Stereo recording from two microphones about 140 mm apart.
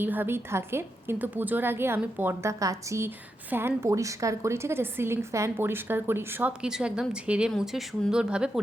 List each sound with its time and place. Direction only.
0.0 s a woman's voice: 15° right (ahead or behind)